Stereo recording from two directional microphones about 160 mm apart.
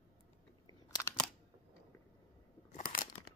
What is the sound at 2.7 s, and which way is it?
Crunch, 55° left (ahead or behind).